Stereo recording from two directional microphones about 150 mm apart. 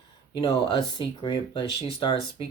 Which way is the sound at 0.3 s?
35° left (ahead or behind).